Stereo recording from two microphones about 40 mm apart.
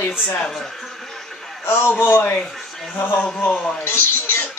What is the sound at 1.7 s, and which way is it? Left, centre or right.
A man's voice, left.